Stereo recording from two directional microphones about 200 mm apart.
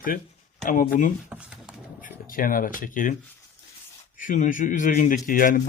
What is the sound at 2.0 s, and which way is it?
Speech, 45° left (ahead or behind).